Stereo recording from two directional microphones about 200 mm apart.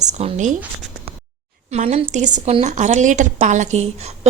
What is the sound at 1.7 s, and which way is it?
A woman's voice, 35° right (ahead or behind).